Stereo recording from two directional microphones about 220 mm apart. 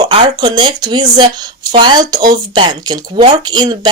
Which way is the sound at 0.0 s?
20° right (ahead or behind).